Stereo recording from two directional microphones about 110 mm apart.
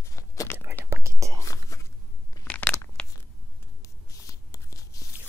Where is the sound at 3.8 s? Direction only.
30° left (ahead or behind).